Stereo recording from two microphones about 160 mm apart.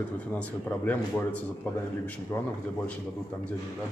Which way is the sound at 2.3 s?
20° left (ahead or behind).